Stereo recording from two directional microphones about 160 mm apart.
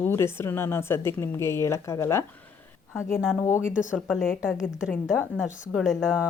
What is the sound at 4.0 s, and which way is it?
Speech, centre (ahead or behind).